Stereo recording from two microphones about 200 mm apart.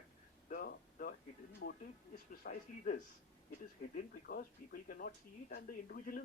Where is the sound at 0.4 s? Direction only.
50° left (ahead or behind).